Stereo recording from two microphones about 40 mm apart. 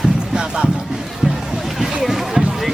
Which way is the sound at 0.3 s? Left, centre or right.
Centre.